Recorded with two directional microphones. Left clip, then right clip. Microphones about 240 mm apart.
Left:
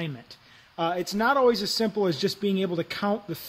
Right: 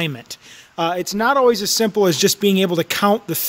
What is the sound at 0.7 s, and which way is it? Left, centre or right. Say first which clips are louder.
Speech: right 7 dB; right.